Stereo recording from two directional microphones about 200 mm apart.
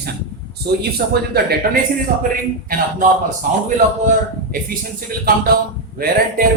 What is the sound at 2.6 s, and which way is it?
Speech, 40° right (ahead or behind).